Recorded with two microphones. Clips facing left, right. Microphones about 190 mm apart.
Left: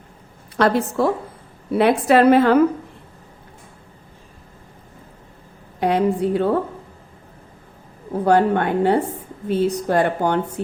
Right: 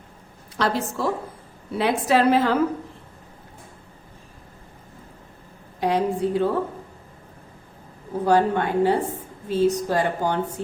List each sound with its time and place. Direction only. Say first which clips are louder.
0.5 s a woman's voice: left 6 dB; 60° left (ahead or behind)
5.8 s a woman's voice: left 3 dB; 60° left (ahead or behind)
8.2 s a woman's voice: left 3 dB; 60° left (ahead or behind)